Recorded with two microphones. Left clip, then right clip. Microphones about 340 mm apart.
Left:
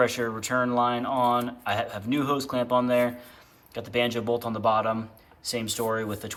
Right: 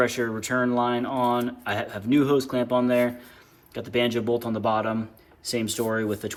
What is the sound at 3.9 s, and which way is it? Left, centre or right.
Speech, left.